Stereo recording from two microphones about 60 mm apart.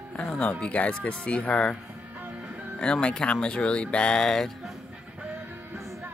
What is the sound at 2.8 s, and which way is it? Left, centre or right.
Speech, centre.